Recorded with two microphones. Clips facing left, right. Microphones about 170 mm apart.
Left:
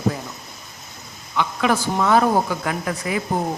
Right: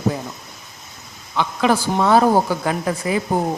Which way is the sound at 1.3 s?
30° right (ahead or behind).